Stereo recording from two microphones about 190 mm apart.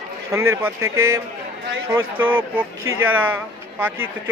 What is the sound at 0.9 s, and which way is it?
Speech, 90° right.